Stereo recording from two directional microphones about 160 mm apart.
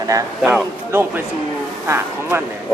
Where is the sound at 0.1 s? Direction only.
20° right (ahead or behind).